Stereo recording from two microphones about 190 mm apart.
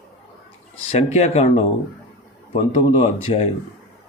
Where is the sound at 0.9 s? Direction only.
35° left (ahead or behind).